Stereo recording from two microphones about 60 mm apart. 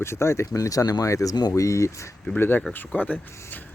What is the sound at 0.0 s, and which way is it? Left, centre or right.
Speech, left.